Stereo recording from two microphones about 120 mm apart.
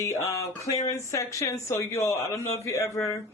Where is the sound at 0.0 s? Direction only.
25° left (ahead or behind).